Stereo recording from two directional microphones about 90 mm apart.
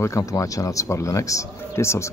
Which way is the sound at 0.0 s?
35° left (ahead or behind).